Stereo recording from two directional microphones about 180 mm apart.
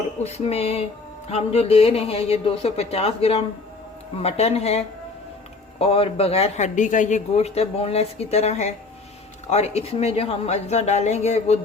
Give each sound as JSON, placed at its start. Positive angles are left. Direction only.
{"t": 0.2, "sound": "a man's voice", "side_deg": 35}
{"t": 5.8, "sound": "a man's voice", "side_deg": 35}